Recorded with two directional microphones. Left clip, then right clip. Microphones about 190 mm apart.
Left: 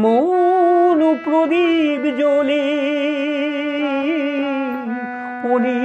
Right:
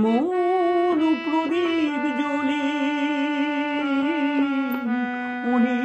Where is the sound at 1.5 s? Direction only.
50° left (ahead or behind).